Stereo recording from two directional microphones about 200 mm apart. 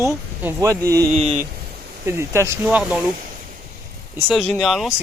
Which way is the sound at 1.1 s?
35° right (ahead or behind).